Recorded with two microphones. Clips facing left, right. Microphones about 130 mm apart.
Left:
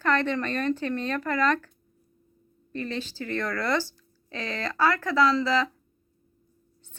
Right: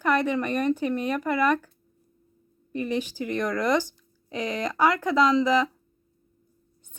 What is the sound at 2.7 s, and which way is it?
Speech, 15° right (ahead or behind).